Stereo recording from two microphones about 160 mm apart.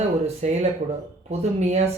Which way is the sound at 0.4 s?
45° right (ahead or behind).